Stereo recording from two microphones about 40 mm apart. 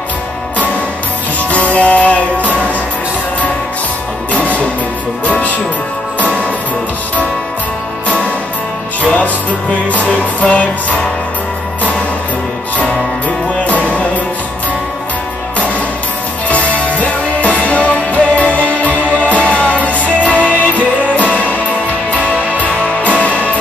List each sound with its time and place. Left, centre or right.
1.5 s music: left
4.3 s music: left
9.1 s music: left
13.7 s music: left
16.4 s music: left